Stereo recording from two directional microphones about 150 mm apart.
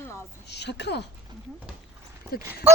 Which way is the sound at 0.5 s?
90° left.